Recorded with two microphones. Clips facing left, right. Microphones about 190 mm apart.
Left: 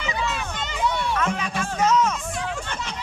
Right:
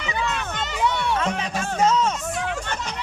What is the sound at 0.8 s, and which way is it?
Music, 65° right (ahead or behind).